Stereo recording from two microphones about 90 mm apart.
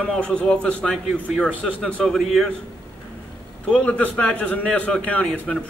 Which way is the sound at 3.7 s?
15° left (ahead or behind).